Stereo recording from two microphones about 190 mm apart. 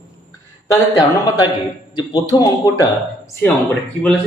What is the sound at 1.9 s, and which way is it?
Speech, 20° left (ahead or behind).